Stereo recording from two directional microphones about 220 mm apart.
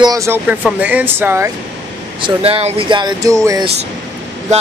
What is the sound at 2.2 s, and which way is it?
Speech, 25° right (ahead or behind).